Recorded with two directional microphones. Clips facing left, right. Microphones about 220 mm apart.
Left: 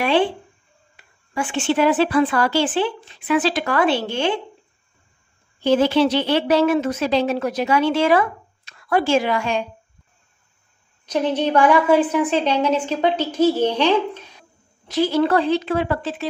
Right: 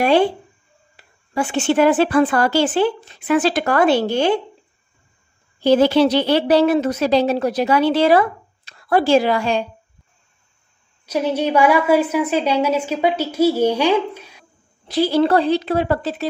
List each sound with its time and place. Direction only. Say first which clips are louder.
0.0 s a woman's voice: right 3 dB; 40° right (ahead or behind)
5.6 s a woman's voice: right 3 dB; 40° right (ahead or behind)
11.1 s a woman's voice: right 1 dB; 10° right (ahead or behind)
14.9 s a woman's voice: right 2 dB; 35° right (ahead or behind)